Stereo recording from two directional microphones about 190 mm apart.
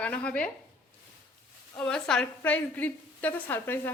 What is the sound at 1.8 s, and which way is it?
A woman's voice, 5° left (ahead or behind).